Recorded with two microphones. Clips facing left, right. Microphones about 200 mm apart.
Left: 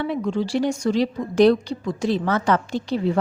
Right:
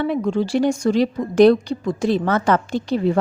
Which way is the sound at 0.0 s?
50° right (ahead or behind).